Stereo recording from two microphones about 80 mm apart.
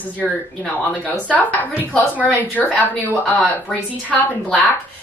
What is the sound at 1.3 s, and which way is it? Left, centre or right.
A woman's voice, left.